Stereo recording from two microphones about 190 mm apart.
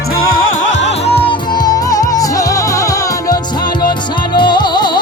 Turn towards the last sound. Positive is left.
turn(degrees=25)  # may be behind; listen again after turning